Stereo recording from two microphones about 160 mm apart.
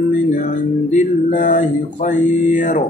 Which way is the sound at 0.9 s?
55° left (ahead or behind).